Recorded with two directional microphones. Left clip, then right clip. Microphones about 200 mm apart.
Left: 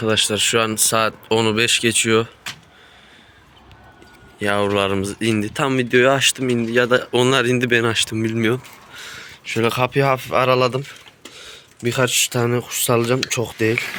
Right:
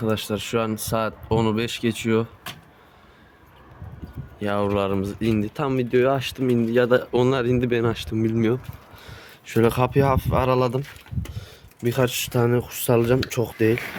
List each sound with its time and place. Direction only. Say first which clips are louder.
0.0 s speech: left 8 dB; 5° right (ahead or behind)
4.4 s speech: left 5 dB; centre (ahead or behind)
6.3 s speech: left 2 dB; 15° right (ahead or behind)
9.2 s a sound: even; 30° right (ahead or behind)
9.6 s speech: left 3 dB; 20° right (ahead or behind)